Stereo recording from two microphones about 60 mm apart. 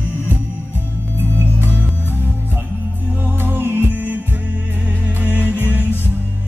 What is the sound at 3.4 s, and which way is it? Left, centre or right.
Music, right.